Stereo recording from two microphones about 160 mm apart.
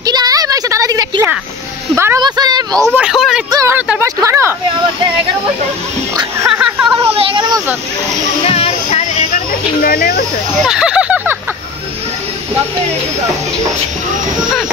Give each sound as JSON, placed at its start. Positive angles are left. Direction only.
{"t": 0.0, "sound": "a sound", "side_deg": -25}
{"t": 2.0, "sound": "speech", "side_deg": -15}
{"t": 2.2, "sound": "a woman's voice", "side_deg": -25}
{"t": 2.9, "sound": "speech", "side_deg": -5}
{"t": 3.4, "sound": "speech", "side_deg": -25}
{"t": 3.7, "sound": "speech", "side_deg": -5}
{"t": 4.0, "sound": "speech", "side_deg": -15}
{"t": 6.5, "sound": "a sound", "side_deg": -5}
{"t": 7.2, "sound": "a sound", "side_deg": -30}
{"t": 8.5, "sound": "music", "side_deg": 40}
{"t": 9.8, "sound": "speech", "side_deg": 70}
{"t": 10.6, "sound": "a sound", "side_deg": -5}